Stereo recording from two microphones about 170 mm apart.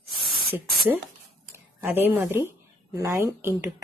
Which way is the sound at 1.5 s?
15° right (ahead or behind).